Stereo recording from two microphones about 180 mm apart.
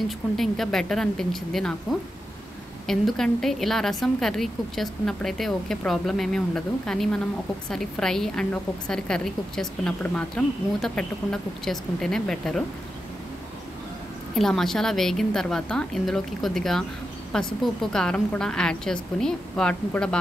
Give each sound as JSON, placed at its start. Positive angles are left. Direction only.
{"t": 0.4, "sound": "a woman's voice", "side_deg": 0}
{"t": 14.3, "sound": "a woman's voice", "side_deg": 0}